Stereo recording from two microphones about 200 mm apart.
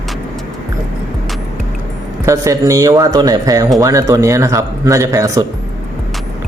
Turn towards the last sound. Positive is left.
turn(degrees=-15)  # may be behind; listen again after turning